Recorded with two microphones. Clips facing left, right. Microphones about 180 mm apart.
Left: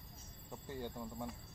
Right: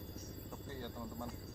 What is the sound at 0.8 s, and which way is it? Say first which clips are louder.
Speech: left 2 dB; 10° left (ahead or behind).